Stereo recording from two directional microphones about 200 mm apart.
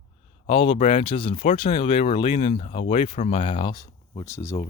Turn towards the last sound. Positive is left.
turn(degrees=15)  # may be behind; listen again after turning